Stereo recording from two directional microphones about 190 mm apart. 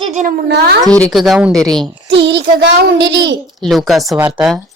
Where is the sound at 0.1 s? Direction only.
45° right (ahead or behind); by 0.8 s 60° right (ahead or behind).